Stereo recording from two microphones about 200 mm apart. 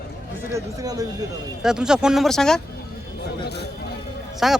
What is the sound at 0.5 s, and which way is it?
Speech, 20° right (ahead or behind).